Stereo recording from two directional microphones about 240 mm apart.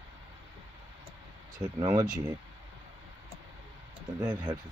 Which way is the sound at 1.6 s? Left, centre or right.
Centre.